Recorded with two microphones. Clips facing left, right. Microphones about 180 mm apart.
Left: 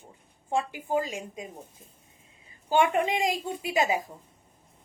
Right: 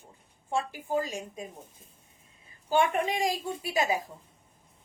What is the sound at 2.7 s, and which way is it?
A woman's voice, 20° left (ahead or behind).